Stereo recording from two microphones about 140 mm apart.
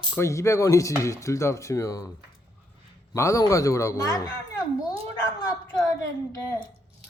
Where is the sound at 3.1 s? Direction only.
20° left (ahead or behind).